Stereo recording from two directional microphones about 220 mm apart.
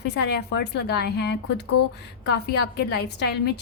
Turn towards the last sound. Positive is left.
turn(degrees=50)  # may be behind; listen again after turning